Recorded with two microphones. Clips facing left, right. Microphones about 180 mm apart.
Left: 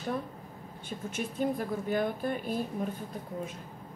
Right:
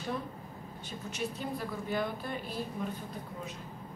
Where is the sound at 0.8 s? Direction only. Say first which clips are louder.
Left 2 dB; 50° left (ahead or behind).